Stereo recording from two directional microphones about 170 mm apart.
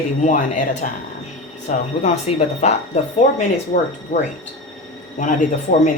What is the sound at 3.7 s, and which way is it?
Speech, 50° left (ahead or behind).